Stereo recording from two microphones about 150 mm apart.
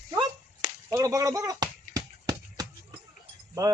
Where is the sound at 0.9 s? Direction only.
25° right (ahead or behind).